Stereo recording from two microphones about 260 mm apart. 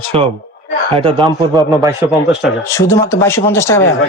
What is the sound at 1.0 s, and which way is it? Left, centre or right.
Speech, centre.